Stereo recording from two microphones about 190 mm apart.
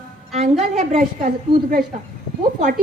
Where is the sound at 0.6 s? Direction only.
35° right (ahead or behind).